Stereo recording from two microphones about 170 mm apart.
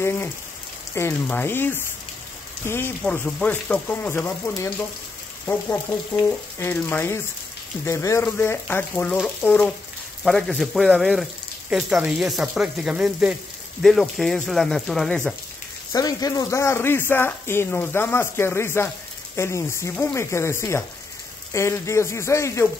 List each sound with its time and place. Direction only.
0.0 s raindrop: 15° left (ahead or behind)
0.9 s speech: 10° left (ahead or behind)
15.9 s speech: 20° left (ahead or behind)